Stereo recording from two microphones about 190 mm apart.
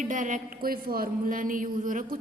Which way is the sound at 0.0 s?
45° right (ahead or behind).